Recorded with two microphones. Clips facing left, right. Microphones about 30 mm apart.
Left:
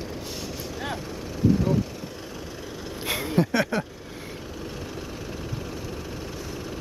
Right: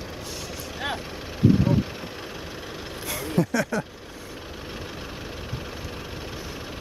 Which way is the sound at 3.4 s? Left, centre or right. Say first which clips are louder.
Left 1 dB; left.